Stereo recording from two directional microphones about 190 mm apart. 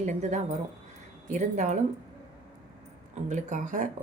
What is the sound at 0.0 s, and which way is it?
Speech, 40° right (ahead or behind).